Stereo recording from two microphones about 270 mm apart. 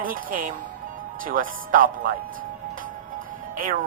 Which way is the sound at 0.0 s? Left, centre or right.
Right.